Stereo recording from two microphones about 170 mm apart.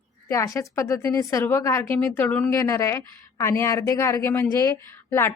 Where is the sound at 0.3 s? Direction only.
20° left (ahead or behind).